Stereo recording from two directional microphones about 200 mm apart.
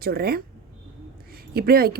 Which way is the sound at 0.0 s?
50° right (ahead or behind).